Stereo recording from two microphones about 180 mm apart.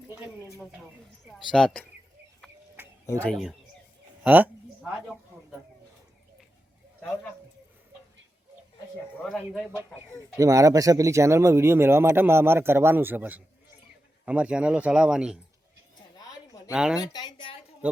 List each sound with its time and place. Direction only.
1.5 s speech: 5° left (ahead or behind)
3.1 s speech: 5° left (ahead or behind)
4.2 s a man's voice: 10° right (ahead or behind)
4.8 s a sound: centre (ahead or behind)
9.2 s speech: centre (ahead or behind)
9.9 s speech: 15° right (ahead or behind)
16.1 s a sound: 20° left (ahead or behind)
16.7 s speech: 5° right (ahead or behind)
17.0 s a woman's voice: 25° left (ahead or behind)